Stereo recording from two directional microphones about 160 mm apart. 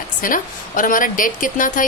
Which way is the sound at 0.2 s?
55° left (ahead or behind).